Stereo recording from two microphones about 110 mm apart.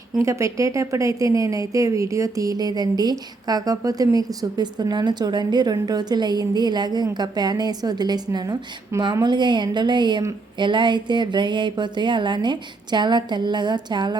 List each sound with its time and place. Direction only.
0.2 s a woman's voice: 25° right (ahead or behind); by 14.2 s 40° right (ahead or behind)